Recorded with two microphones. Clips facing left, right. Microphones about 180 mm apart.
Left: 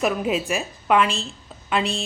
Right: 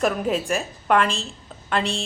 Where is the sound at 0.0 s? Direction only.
5° left (ahead or behind).